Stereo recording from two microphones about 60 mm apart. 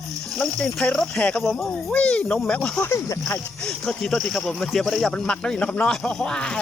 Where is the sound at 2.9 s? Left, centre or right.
Left.